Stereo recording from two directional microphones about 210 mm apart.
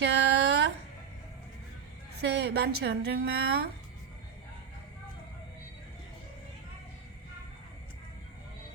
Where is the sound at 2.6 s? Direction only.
50° right (ahead or behind).